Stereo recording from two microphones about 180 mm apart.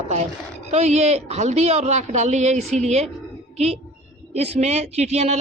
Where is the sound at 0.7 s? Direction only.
40° right (ahead or behind).